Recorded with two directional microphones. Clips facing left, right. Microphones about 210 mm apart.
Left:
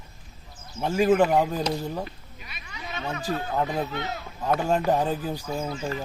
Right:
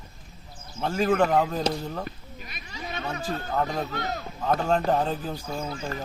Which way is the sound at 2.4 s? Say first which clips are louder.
Right 2 dB; 40° right (ahead or behind).